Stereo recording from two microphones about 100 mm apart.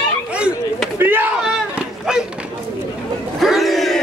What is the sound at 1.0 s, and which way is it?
Speech, 20° right (ahead or behind).